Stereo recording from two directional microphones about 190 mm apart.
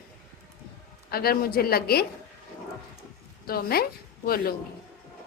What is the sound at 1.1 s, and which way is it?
Speech, 55° left (ahead or behind).